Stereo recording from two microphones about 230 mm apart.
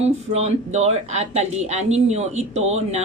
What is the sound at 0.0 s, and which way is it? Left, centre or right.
A woman's voice, right.